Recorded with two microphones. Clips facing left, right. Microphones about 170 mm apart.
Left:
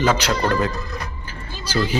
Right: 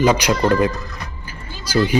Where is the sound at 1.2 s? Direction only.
10° right (ahead or behind).